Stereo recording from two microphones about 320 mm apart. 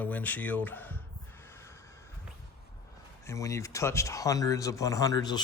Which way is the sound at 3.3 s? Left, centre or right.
Centre.